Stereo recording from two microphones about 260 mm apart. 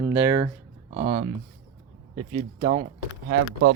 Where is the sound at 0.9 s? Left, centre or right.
Right.